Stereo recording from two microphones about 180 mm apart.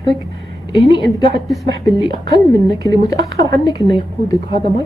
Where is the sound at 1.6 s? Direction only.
Centre (ahead or behind).